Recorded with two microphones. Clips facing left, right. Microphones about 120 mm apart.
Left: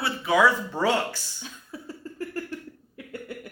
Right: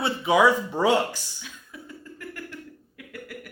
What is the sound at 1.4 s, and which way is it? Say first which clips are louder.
Cough: left 3 dB; 35° left (ahead or behind).